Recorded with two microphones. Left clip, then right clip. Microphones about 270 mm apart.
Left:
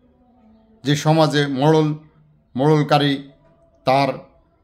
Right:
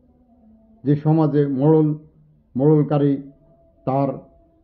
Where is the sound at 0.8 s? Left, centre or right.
Centre.